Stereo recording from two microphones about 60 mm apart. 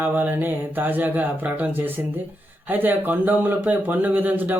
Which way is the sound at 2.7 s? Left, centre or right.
Right.